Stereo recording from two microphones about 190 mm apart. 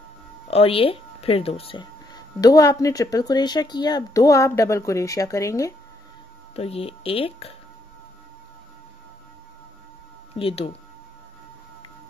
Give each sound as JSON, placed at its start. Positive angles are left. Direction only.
{"t": 0.5, "sound": "speech", "side_deg": 30}
{"t": 6.5, "sound": "speech", "side_deg": 30}
{"t": 10.3, "sound": "speech", "side_deg": 30}